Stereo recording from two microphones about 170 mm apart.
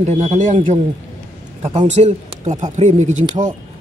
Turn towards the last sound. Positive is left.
turn(degrees=-45)  # may be behind; listen again after turning